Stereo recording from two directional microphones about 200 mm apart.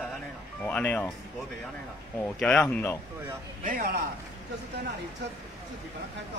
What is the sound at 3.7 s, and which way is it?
Speech, 45° right (ahead or behind).